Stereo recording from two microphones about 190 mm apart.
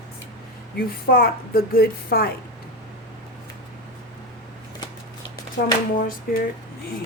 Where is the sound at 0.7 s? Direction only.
50° left (ahead or behind).